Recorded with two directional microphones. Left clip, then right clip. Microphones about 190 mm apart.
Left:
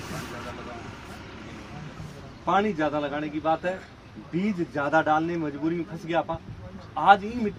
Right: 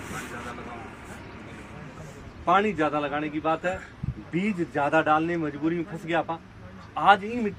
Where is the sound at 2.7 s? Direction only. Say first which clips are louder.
Right 1 dB; 20° right (ahead or behind).